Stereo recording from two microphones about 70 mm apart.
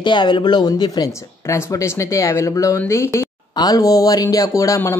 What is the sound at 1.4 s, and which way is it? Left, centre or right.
A woman's voice, left.